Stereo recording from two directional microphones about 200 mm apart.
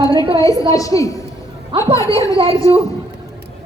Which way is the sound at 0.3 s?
15° left (ahead or behind).